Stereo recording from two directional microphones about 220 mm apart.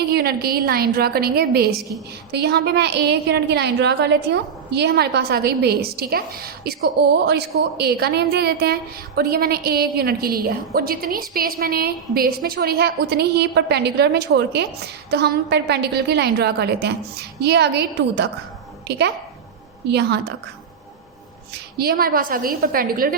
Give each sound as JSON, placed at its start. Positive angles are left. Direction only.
{"t": 0.1, "sound": "a woman's voice", "side_deg": -45}
{"t": 21.8, "sound": "a woman's voice", "side_deg": -40}